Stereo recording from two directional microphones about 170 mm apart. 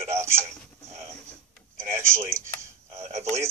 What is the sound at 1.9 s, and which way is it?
Speech, 15° right (ahead or behind).